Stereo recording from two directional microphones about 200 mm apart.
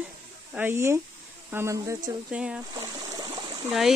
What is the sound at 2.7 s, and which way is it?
Stream, 20° right (ahead or behind).